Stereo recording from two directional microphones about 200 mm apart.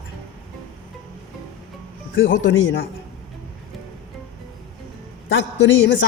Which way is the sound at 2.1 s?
75° left (ahead or behind).